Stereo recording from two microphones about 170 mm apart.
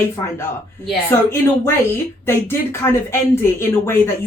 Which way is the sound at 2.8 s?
15° left (ahead or behind).